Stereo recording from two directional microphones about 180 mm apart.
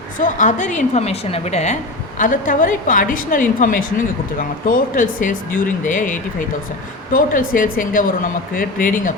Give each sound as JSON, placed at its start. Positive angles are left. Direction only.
{"t": 0.2, "sound": "a woman's voice", "side_deg": 45}
{"t": 2.1, "sound": "a woman's voice", "side_deg": 45}